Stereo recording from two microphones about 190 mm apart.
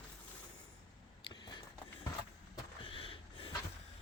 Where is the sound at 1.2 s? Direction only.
25° left (ahead or behind).